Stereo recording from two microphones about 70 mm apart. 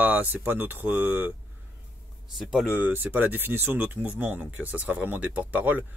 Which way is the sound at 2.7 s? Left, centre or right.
Right.